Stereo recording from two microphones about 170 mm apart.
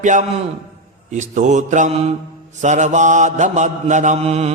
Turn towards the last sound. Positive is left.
turn(degrees=-40)  # may be behind; listen again after turning